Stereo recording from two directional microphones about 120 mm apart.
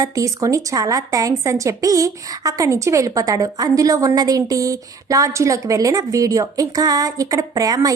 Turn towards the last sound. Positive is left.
turn(degrees=-30)  # may be behind; listen again after turning